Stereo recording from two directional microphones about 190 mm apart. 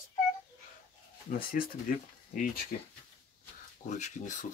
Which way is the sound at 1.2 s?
50° left (ahead or behind).